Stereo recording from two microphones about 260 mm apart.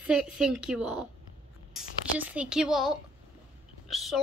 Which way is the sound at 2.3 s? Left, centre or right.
Centre.